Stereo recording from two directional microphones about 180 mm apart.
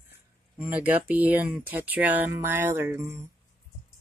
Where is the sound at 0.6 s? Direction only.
10° right (ahead or behind).